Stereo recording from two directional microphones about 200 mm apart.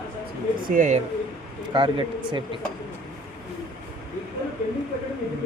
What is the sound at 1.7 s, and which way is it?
Speech, 25° right (ahead or behind).